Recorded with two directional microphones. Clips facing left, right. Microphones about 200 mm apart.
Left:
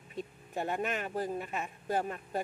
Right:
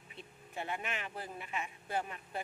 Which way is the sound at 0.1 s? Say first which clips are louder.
Left 9 dB; 40° left (ahead or behind).